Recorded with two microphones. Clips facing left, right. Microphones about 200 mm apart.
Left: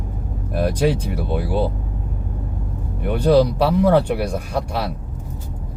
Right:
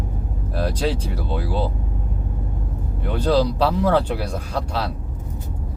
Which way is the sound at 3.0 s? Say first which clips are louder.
Left 4 dB; 15° left (ahead or behind).